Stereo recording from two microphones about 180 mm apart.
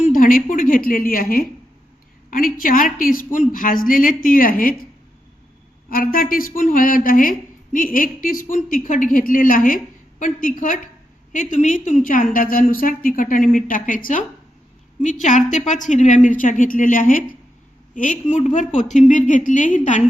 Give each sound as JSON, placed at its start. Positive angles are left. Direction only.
{"t": 0.0, "sound": "a woman's voice", "side_deg": 50}
{"t": 5.9, "sound": "a woman's voice", "side_deg": 55}